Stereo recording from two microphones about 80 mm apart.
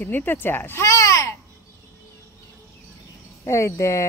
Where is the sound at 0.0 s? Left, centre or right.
Left.